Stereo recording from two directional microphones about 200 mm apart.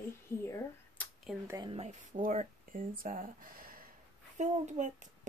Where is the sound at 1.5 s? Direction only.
20° right (ahead or behind).